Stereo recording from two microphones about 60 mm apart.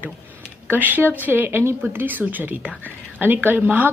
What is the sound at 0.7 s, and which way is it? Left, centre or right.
A woman's voice, right.